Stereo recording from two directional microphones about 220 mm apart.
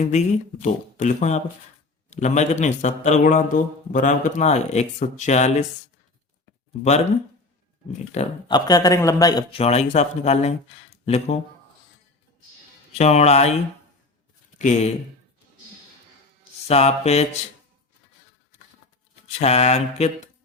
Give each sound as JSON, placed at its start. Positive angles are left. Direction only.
{"t": 0.0, "sound": "a man's voice", "side_deg": 30}
{"t": 8.1, "sound": "speech", "side_deg": 25}
{"t": 13.0, "sound": "speech", "side_deg": 30}
{"t": 14.6, "sound": "a man's voice", "side_deg": 30}
{"t": 16.6, "sound": "speech", "side_deg": 30}
{"t": 19.4, "sound": "speech", "side_deg": 30}